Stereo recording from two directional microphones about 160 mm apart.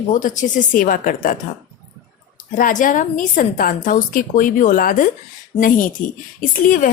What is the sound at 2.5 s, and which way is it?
A woman's voice, 55° left (ahead or behind).